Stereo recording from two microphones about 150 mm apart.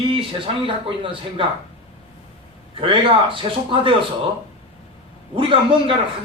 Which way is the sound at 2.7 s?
35° right (ahead or behind).